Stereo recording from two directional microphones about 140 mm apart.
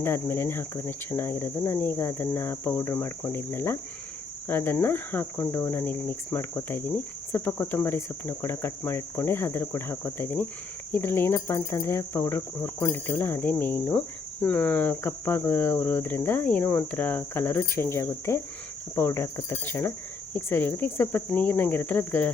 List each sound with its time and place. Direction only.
0.0 s speech: 15° left (ahead or behind)